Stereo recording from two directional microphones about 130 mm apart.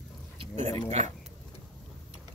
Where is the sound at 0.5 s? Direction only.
60° right (ahead or behind).